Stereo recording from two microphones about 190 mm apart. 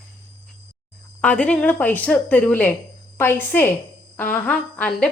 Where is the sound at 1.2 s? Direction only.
5° left (ahead or behind).